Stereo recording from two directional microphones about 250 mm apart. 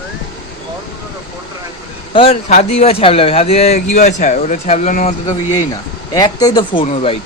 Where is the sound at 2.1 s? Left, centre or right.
Left.